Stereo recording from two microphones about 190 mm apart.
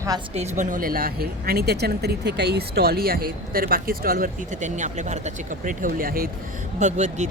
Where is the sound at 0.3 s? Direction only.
40° right (ahead or behind).